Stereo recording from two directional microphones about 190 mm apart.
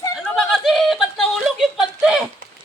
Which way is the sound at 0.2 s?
Centre (ahead or behind).